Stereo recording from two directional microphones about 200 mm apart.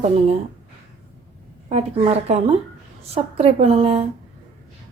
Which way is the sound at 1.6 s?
30° right (ahead or behind).